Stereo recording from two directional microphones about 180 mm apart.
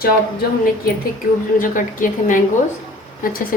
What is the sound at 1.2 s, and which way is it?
A woman's voice, 50° left (ahead or behind).